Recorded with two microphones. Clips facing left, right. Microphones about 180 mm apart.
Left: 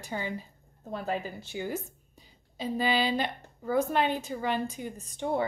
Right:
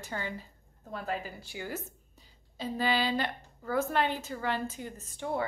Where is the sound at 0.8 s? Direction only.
25° left (ahead or behind).